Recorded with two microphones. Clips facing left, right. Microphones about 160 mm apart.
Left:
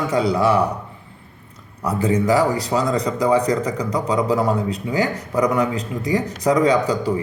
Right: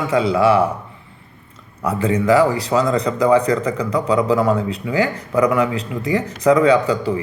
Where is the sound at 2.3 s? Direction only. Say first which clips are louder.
Right 3 dB; 40° left (ahead or behind).